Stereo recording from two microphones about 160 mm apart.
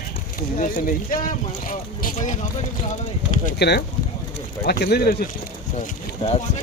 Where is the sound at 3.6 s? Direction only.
90° left.